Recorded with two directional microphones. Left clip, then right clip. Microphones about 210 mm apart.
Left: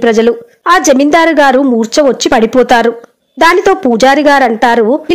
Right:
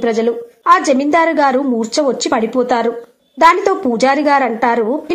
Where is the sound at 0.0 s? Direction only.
35° left (ahead or behind).